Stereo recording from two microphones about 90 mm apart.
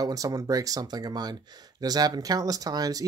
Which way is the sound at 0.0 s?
40° right (ahead or behind).